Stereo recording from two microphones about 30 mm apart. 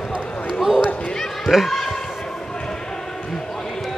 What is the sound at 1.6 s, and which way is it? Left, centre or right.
Basketball bounce, centre.